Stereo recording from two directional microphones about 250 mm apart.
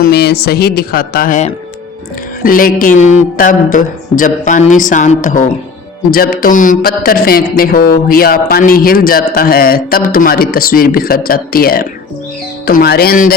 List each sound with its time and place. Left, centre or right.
0.0 s speech: left
3.0 s a sound: left
3.3 s speech: left